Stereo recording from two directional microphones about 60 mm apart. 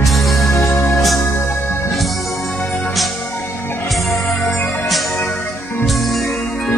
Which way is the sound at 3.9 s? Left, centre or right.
Centre.